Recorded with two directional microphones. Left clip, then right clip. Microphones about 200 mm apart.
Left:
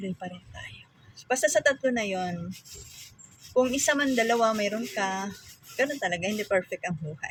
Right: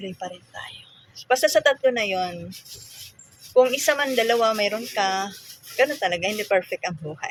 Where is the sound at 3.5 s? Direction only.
15° left (ahead or behind).